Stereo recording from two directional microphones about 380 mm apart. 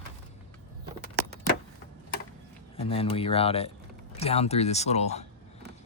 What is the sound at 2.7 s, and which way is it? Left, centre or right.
Speech, centre.